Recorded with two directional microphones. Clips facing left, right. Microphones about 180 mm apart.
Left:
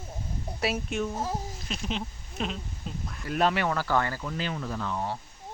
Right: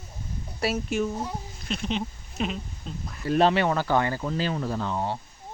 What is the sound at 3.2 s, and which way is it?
Speech, 30° right (ahead or behind).